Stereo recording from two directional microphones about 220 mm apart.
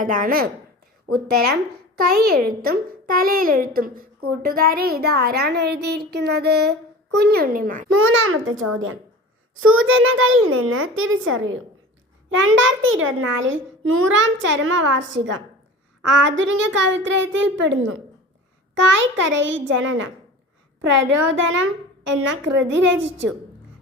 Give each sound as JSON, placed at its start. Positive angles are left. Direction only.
{"t": 0.0, "sound": "a woman's voice", "side_deg": -35}
{"t": 2.0, "sound": "a child's voice", "side_deg": -45}
{"t": 7.9, "sound": "a child's voice", "side_deg": -75}